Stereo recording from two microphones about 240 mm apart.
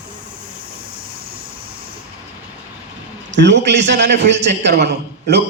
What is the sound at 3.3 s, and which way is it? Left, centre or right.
A man's voice, right.